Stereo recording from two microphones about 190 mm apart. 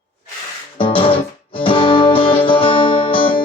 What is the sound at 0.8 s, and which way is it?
Guitar, 25° left (ahead or behind).